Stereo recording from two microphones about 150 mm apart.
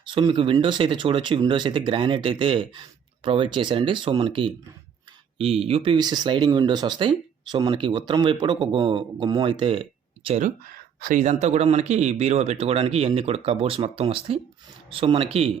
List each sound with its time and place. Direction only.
0.1 s speech: 35° right (ahead or behind)
10.2 s speech: 50° right (ahead or behind)
10.7 s a sound: 70° right (ahead or behind)
11.2 s speech: 50° right (ahead or behind)